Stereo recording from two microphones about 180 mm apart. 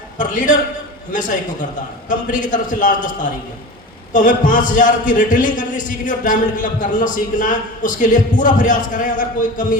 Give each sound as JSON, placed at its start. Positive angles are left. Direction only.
{"t": 0.2, "sound": "a man's voice", "side_deg": 45}
{"t": 2.0, "sound": "a man's voice", "side_deg": 45}